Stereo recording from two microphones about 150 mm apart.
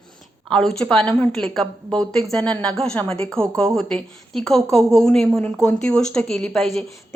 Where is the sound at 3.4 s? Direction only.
5° left (ahead or behind).